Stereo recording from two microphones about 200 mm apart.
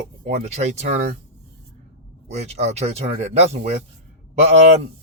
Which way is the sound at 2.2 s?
35° right (ahead or behind).